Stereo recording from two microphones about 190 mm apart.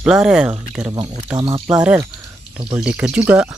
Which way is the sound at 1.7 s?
5° right (ahead or behind).